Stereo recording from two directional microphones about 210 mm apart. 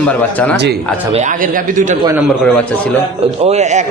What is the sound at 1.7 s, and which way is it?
Speech, 35° right (ahead or behind).